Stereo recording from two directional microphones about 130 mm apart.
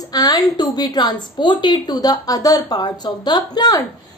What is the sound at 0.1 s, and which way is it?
A woman's voice, 30° left (ahead or behind).